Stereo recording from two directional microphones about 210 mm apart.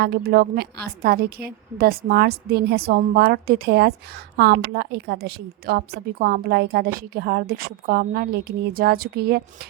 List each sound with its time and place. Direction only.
0.0 s a woman's voice: 50° right (ahead or behind)